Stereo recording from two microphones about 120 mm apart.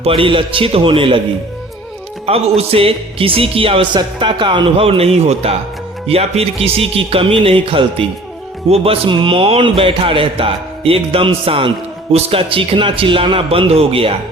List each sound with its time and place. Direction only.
0.0 s speech: 50° right (ahead or behind)
2.2 s speech: 55° right (ahead or behind)